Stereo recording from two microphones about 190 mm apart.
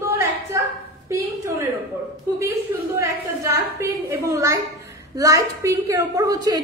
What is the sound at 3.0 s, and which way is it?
A woman's voice, 15° right (ahead or behind).